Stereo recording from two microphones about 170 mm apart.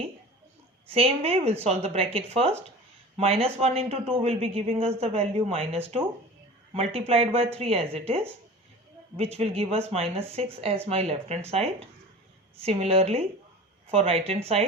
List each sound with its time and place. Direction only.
0.9 s speech: 35° right (ahead or behind)
7.3 s speech: 35° right (ahead or behind)